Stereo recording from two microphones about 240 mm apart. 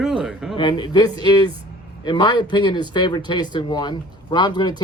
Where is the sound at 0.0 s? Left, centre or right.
Centre.